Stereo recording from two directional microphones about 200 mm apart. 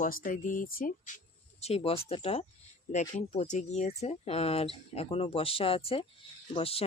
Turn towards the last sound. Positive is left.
turn(degrees=30)  # may be behind; listen again after turning